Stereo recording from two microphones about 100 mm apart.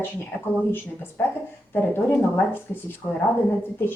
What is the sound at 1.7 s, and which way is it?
Speech, 20° left (ahead or behind).